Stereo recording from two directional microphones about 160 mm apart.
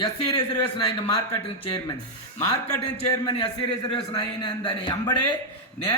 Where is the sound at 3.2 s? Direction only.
30° left (ahead or behind).